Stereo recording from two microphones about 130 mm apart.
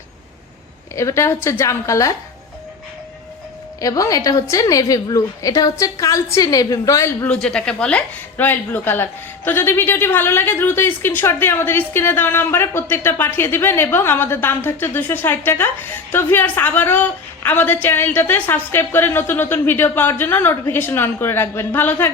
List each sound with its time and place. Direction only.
0.9 s a woman's voice: 20° left (ahead or behind)
3.8 s a woman's voice: 25° left (ahead or behind)
7.4 s speech: 5° left (ahead or behind)